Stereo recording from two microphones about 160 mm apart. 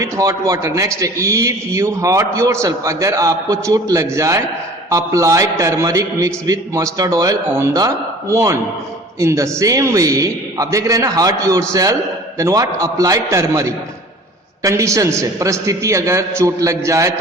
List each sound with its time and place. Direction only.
0.0 s a man's voice: 20° right (ahead or behind)